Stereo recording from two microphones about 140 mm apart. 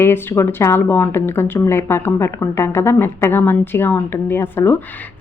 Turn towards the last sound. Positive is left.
turn(degrees=15)  # may be behind; listen again after turning